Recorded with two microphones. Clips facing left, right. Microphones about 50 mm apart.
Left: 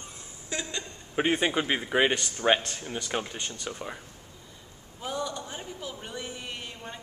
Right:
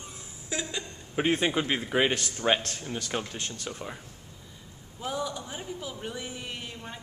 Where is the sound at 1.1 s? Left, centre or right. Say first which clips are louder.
Even; centre.